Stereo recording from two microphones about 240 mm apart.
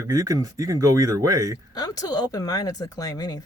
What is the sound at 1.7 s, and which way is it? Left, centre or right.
Speech, centre.